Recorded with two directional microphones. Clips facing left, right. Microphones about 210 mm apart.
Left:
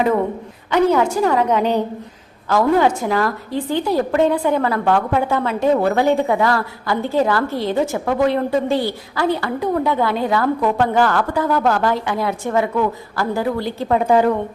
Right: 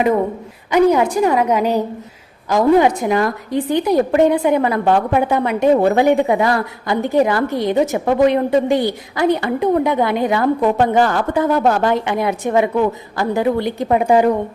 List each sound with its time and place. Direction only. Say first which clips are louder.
0.7 s a woman's voice: right 2 dB; 15° right (ahead or behind)